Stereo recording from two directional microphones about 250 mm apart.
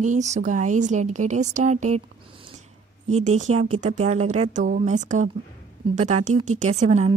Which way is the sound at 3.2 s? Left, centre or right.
Right.